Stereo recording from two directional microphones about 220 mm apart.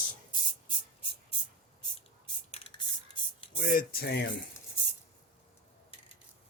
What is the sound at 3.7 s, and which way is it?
Speech, 45° left (ahead or behind).